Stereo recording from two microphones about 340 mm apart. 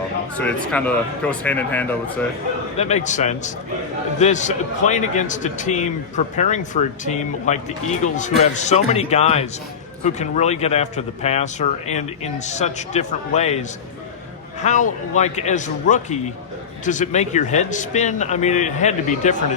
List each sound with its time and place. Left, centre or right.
0.3 s speech: centre
2.7 s a man's voice: centre